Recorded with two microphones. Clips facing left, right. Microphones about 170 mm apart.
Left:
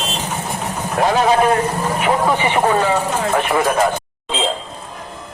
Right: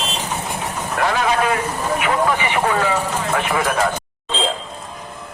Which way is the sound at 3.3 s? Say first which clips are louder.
Left 3 dB; 15° left (ahead or behind).